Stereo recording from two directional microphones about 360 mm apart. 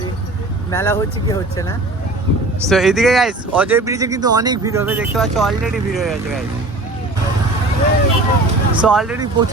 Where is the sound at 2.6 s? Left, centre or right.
Centre.